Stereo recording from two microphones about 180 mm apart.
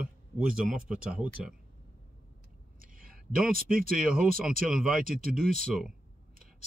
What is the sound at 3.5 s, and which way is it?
Speech, 55° right (ahead or behind).